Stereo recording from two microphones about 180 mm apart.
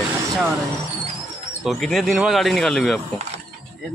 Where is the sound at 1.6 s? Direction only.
Centre (ahead or behind).